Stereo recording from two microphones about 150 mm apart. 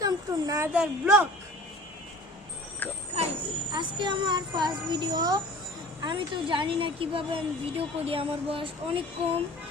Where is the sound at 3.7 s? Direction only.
30° right (ahead or behind).